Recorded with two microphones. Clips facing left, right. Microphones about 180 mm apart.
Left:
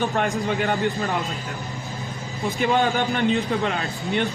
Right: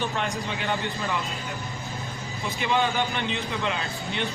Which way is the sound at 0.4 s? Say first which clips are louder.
Left 7 dB; 50° left (ahead or behind).